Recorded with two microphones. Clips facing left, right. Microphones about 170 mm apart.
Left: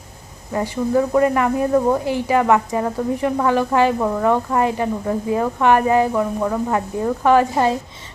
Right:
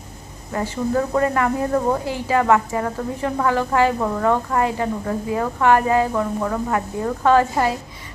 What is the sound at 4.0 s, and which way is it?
A woman's voice, 5° left (ahead or behind).